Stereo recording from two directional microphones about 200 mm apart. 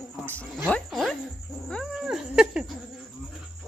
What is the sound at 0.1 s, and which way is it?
Cricket, 10° right (ahead or behind).